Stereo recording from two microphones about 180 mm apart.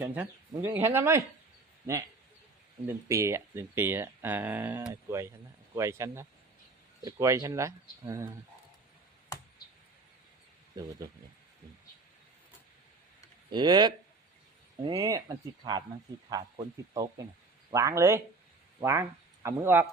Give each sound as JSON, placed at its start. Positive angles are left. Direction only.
{"t": 0.0, "sound": "speech", "side_deg": -10}
{"t": 2.8, "sound": "speech", "side_deg": -15}
{"t": 13.5, "sound": "speech", "side_deg": -25}
{"t": 16.3, "sound": "speech", "side_deg": -20}